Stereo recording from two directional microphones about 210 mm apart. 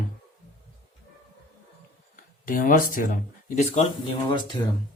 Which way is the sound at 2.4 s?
40° left (ahead or behind).